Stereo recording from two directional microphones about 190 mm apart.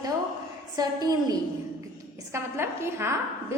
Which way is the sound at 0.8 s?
20° right (ahead or behind).